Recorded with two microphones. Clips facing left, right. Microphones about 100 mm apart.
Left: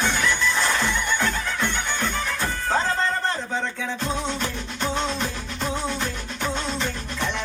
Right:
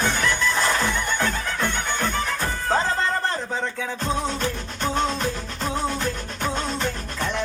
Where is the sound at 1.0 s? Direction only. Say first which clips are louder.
Even; 40° right (ahead or behind).